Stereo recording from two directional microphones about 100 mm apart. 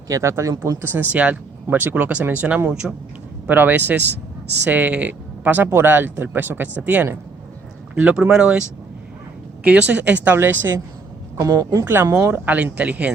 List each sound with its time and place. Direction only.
0.1 s speech: 30° right (ahead or behind); by 8.6 s 10° right (ahead or behind)
9.6 s speech: 15° right (ahead or behind)
11.3 s speech: 35° right (ahead or behind); by 13.1 s 15° right (ahead or behind)